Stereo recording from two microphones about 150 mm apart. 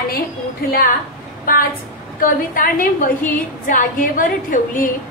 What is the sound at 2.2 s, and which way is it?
A woman's voice, 70° left (ahead or behind).